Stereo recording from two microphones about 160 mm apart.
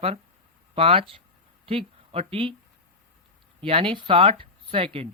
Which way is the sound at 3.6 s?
35° right (ahead or behind).